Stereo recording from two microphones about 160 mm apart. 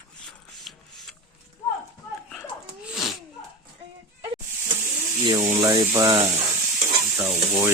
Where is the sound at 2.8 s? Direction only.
Centre (ahead or behind).